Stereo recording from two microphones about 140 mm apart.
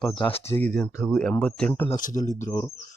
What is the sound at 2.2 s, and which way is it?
Speech, 60° left (ahead or behind).